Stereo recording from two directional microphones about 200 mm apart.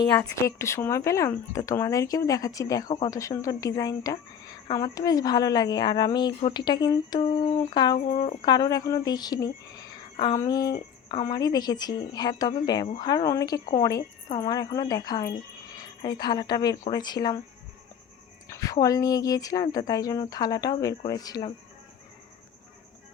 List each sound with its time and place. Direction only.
0.2 s speech: 15° left (ahead or behind)
18.4 s speech: 15° left (ahead or behind)